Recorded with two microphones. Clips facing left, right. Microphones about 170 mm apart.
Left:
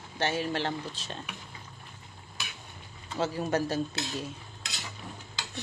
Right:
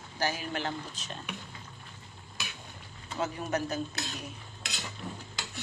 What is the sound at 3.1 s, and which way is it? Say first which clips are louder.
Stir: left 3 dB; 30° left (ahead or behind).